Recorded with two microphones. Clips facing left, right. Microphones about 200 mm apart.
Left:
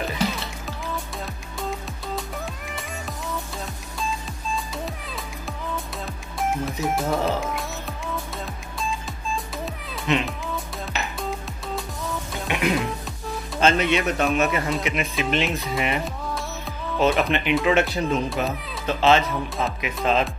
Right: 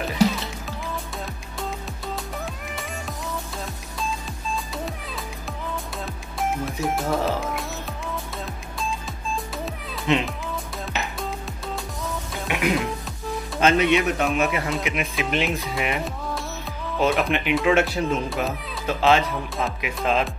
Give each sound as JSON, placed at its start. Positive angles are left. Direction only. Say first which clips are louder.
{"t": 2.1, "sound": "music", "louder": "left 1 dB", "side_deg": 0}
{"t": 6.6, "sound": "speech", "louder": "left 1 dB", "side_deg": 0}
{"t": 10.1, "sound": "speech", "louder": "right 1 dB", "side_deg": -25}
{"t": 11.1, "sound": "music", "louder": "left 1 dB", "side_deg": 0}
{"t": 13.6, "sound": "speech", "louder": "right 2 dB", "side_deg": -15}
{"t": 14.2, "sound": "a child's voice", "louder": "left 1 dB", "side_deg": 0}